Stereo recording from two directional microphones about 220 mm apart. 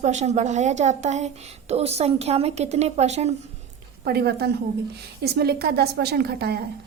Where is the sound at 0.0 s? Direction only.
30° right (ahead or behind).